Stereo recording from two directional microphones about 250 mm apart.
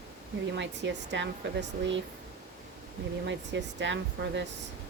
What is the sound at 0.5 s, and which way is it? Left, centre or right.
Speech, right.